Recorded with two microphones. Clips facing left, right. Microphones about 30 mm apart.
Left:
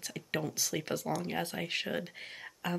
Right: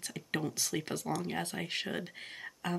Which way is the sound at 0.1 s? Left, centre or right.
Centre.